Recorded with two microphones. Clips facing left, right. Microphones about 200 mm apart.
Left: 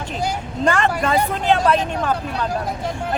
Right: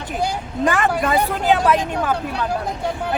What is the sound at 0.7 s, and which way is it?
Speech, 5° right (ahead or behind).